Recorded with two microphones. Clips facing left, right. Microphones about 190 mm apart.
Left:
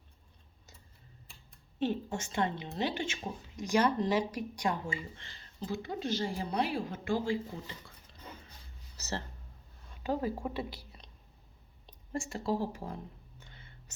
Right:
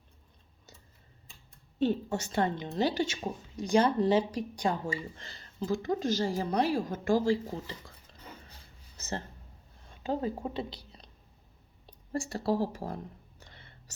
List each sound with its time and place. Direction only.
1.8 s a woman's voice: 35° right (ahead or behind)
9.9 s a woman's voice: 30° right (ahead or behind)
12.1 s a woman's voice: 35° right (ahead or behind)
13.4 s whispering: 40° right (ahead or behind)